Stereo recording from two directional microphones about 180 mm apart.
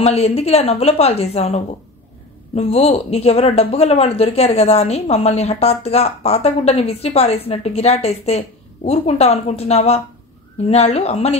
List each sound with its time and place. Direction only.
0.0 s speech: 35° left (ahead or behind)